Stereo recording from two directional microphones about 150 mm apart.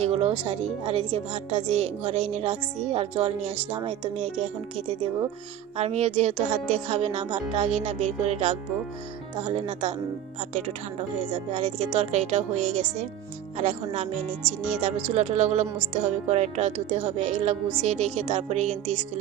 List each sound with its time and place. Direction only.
0.0 s speech: 45° right (ahead or behind)
11.6 s speech: 50° right (ahead or behind)
15.1 s speech: 50° right (ahead or behind)